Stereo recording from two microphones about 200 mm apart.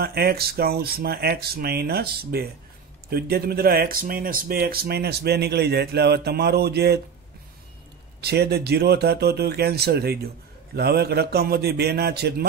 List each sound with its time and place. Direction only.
0.0 s speech: 50° right (ahead or behind)
8.2 s speech: 55° right (ahead or behind)